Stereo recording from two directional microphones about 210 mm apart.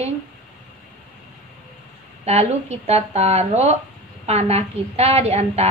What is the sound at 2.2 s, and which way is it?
A woman's voice, 30° right (ahead or behind).